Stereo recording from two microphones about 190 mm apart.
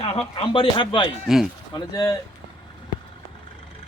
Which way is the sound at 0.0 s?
30° left (ahead or behind).